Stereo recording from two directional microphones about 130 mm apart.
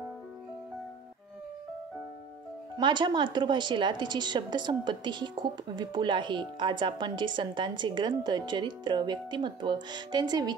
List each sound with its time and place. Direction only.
2.8 s a woman's voice: 35° right (ahead or behind)